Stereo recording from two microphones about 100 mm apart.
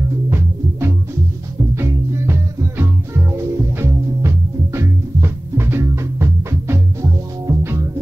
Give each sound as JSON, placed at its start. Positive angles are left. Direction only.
{"t": 0.3, "sound": "music", "side_deg": -25}